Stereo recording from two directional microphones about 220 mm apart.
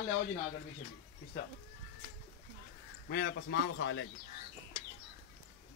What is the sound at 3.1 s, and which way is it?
Speech, 45° left (ahead or behind).